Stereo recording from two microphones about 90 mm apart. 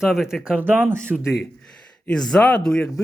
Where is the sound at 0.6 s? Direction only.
20° right (ahead or behind).